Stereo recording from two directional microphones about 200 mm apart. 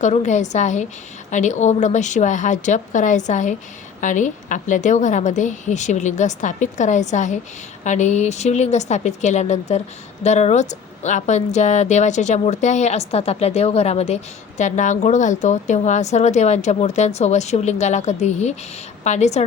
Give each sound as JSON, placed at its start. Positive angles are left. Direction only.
{"t": 0.0, "sound": "a woman's voice", "side_deg": 35}